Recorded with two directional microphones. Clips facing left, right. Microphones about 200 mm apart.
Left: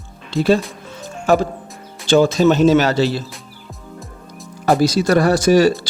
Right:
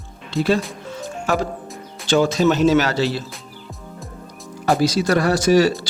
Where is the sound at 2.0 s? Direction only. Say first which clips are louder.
Left 4 dB; 35° left (ahead or behind).